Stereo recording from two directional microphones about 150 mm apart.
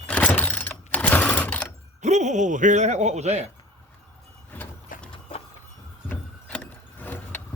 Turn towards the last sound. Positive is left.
turn(degrees=10)  # may be behind; listen again after turning